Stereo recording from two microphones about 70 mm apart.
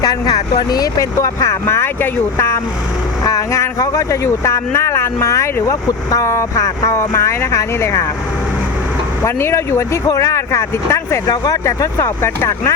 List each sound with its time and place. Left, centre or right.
0.0 s speech: left
1.6 s speech: left
3.2 s speech: left
3.6 s speech: left
9.2 s speech: left
11.3 s speech: left
11.6 s speech: left